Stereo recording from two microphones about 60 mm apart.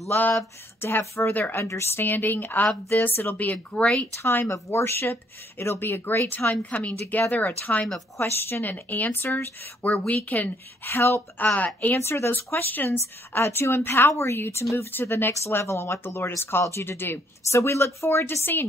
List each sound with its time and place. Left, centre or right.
0.1 s speech: left
0.7 s a woman's voice: left
1.2 s a woman's voice: left
1.6 s speech: left
3.5 s speech: centre
4.2 s speech: left
4.5 s a woman's voice: left
8.2 s a woman's voice: left
10.9 s a woman's voice: left
11.3 s a woman's voice: left
12.0 s a woman's voice: left
12.5 s a woman's voice: left
14.9 s speech: left
15.3 s a woman's voice: left